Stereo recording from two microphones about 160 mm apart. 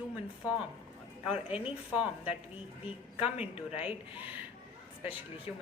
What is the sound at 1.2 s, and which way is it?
A woman's voice, 5° right (ahead or behind).